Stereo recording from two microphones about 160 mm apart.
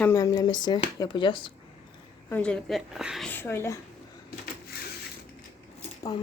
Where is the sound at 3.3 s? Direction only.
15° left (ahead or behind).